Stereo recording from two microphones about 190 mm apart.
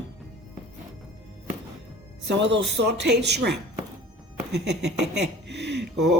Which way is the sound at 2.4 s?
65° right (ahead or behind).